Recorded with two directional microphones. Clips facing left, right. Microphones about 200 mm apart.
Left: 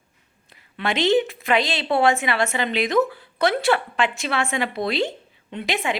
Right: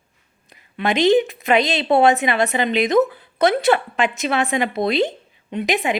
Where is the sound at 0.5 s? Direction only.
15° right (ahead or behind).